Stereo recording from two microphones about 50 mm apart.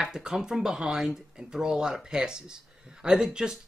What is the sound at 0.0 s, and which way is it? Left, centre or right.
Speech, centre.